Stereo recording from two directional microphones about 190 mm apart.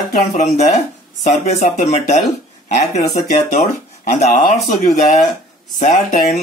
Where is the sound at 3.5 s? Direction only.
40° left (ahead or behind).